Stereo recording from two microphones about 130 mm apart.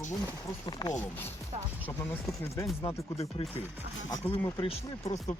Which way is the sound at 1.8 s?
15° left (ahead or behind).